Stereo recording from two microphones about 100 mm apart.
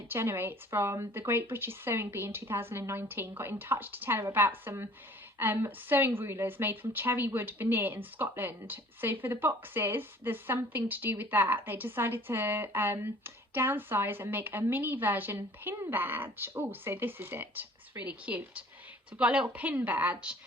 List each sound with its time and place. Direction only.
0.1 s a woman's voice: 25° right (ahead or behind)